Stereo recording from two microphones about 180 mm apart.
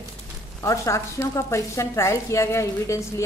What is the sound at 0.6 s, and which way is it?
Speech, 15° left (ahead or behind).